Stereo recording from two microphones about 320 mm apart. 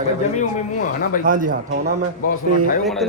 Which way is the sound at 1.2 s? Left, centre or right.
Right.